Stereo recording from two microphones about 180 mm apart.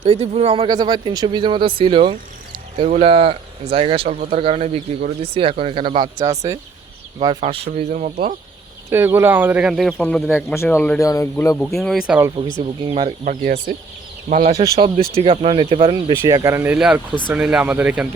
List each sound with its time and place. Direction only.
0.0 s speech: 35° right (ahead or behind)
8.9 s speech: 10° right (ahead or behind)
10.5 s speech: 15° left (ahead or behind); by 12.3 s 5° right (ahead or behind)
12.8 s speech: 30° right (ahead or behind)
13.2 s speech: 45° right (ahead or behind)
14.5 s speech: 20° right (ahead or behind)
15.1 s speech: 35° right (ahead or behind); by 18.1 s 10° right (ahead or behind)